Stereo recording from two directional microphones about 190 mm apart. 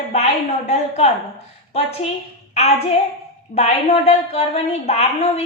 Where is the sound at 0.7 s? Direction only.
35° left (ahead or behind).